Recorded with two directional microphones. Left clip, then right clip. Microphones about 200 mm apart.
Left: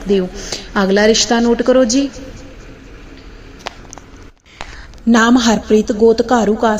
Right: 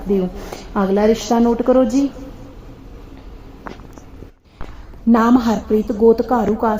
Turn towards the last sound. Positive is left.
turn(degrees=10)  # may be behind; listen again after turning